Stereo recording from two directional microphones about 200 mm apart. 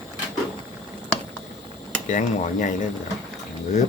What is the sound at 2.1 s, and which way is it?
Speech, 40° left (ahead or behind).